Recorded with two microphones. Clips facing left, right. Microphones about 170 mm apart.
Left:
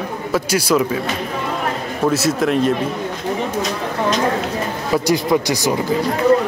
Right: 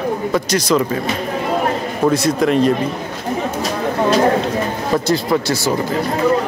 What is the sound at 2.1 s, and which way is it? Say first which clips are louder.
Speech: right 2 dB; 5° left (ahead or behind).